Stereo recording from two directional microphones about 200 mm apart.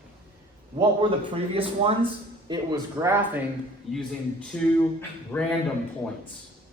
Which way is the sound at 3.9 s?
Centre (ahead or behind).